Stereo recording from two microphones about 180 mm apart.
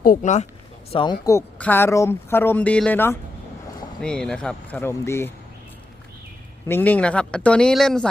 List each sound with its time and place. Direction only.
0.0 s speech: 45° left (ahead or behind)
0.9 s speech: 25° left (ahead or behind)
6.7 s speech: 10° left (ahead or behind)